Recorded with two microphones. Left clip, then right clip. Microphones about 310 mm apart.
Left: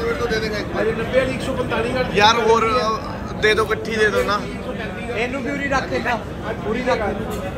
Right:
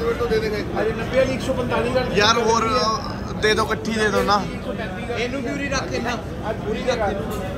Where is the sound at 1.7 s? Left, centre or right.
Right.